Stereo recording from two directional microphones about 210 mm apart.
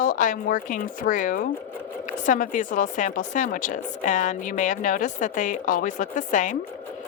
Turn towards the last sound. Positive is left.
turn(degrees=35)  # may be behind; listen again after turning